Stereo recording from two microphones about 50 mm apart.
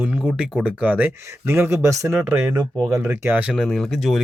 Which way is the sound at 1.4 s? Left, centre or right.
Right.